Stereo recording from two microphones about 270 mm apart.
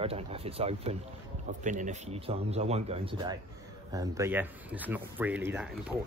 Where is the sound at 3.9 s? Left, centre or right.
Centre.